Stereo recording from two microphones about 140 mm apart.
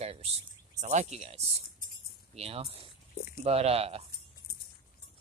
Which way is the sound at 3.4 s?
45° right (ahead or behind).